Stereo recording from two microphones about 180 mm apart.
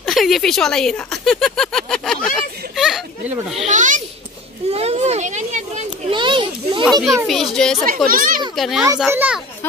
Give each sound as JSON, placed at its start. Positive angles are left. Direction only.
{"t": 0.0, "sound": "a sound", "side_deg": 0}
{"t": 3.6, "sound": "a child's voice", "side_deg": -45}
{"t": 4.6, "sound": "children playing", "side_deg": -35}
{"t": 6.1, "sound": "a sound", "side_deg": -25}
{"t": 6.8, "sound": "speech", "side_deg": 0}
{"t": 8.1, "sound": "a child's voice", "side_deg": -50}
{"t": 8.5, "sound": "a child's voice", "side_deg": 0}